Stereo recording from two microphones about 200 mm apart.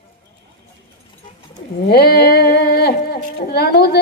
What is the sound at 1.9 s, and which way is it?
Speech, 50° left (ahead or behind).